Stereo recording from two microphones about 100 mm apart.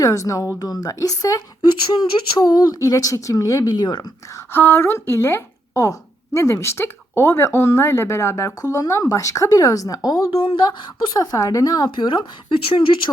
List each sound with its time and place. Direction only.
0.0 s speech: 35° left (ahead or behind)
1.9 s a woman's voice: 45° left (ahead or behind)
4.5 s a woman's voice: 20° left (ahead or behind)
10.3 s a woman's voice: 60° left (ahead or behind)